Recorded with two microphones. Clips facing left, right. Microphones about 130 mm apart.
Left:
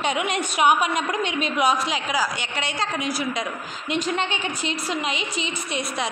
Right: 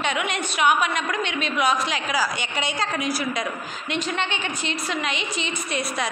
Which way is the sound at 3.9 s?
40° left (ahead or behind).